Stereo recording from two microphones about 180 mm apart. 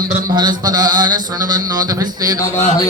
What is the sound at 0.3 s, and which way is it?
Mantra, 20° right (ahead or behind).